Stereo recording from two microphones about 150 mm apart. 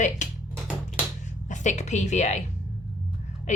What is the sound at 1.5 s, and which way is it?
Speech, 55° left (ahead or behind).